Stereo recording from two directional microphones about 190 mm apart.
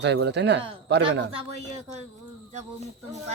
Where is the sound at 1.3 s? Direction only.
35° right (ahead or behind).